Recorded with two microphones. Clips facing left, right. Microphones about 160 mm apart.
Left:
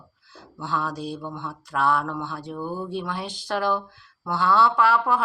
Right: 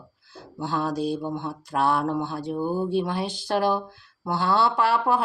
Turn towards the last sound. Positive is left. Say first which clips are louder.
# left 1 dB
turn(degrees=-35)  # may be behind; listen again after turning